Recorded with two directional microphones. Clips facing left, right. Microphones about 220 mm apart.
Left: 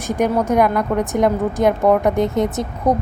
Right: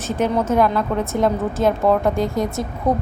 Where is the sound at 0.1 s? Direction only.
15° left (ahead or behind).